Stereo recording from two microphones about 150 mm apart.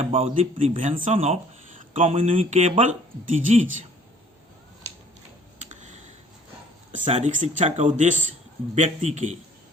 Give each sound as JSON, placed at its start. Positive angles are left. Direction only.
{"t": 0.0, "sound": "speech", "side_deg": -40}
{"t": 0.8, "sound": "speech", "side_deg": -55}
{"t": 1.1, "sound": "speech", "side_deg": -40}
{"t": 5.5, "sound": "computer keyboard", "side_deg": -55}
{"t": 6.9, "sound": "speech", "side_deg": -50}